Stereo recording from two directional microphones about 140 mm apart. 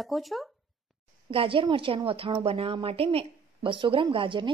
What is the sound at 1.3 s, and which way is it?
A woman's voice, 40° right (ahead or behind).